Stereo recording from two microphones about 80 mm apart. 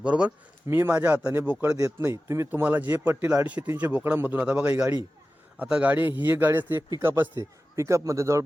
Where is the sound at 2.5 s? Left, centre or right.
Right.